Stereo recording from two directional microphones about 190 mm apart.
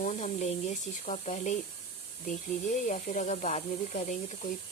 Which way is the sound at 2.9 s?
40° left (ahead or behind).